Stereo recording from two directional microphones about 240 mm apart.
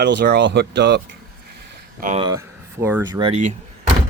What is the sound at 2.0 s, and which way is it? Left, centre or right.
Speech, right.